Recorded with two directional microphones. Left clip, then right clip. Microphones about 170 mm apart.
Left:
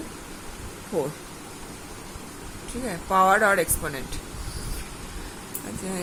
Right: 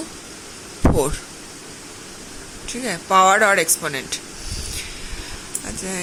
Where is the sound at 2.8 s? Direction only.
25° right (ahead or behind).